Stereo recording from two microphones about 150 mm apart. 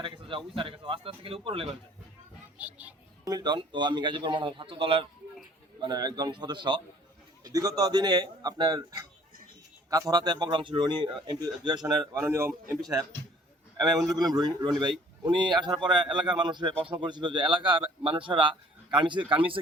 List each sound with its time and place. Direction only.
0.0 s speech: 35° right (ahead or behind)
2.6 s a child's voice: 10° right (ahead or behind)
3.2 s speech: 25° right (ahead or behind)
5.8 s speech: 25° right (ahead or behind)
12.2 s a child's voice: 15° right (ahead or behind)
13.7 s a man's voice: 25° right (ahead or behind)